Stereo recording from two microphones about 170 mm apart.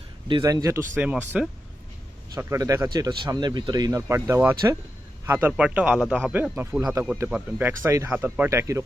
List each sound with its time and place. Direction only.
0.3 s speech: 25° right (ahead or behind)
0.9 s a man's voice: 10° right (ahead or behind)
2.3 s a man's voice: 20° right (ahead or behind)